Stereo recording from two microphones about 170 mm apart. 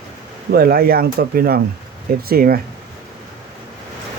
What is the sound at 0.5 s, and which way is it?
Speech, 65° right (ahead or behind).